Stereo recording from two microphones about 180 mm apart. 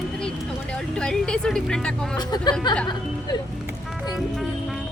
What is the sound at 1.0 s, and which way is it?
Speech, 5° left (ahead or behind).